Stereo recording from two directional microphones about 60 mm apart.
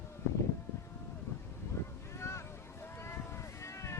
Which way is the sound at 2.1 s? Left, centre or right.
Left.